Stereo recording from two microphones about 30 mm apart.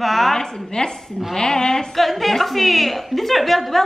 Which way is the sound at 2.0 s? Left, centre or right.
Centre.